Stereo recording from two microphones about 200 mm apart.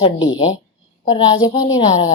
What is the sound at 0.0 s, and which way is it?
A woman's voice, 20° left (ahead or behind).